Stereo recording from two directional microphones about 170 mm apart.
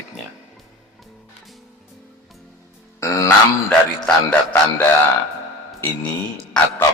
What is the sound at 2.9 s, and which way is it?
Speech, 20° left (ahead or behind).